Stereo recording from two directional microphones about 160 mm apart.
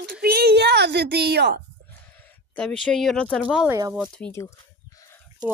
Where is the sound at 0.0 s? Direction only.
80° right.